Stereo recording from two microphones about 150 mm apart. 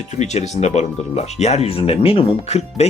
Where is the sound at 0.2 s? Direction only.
50° left (ahead or behind).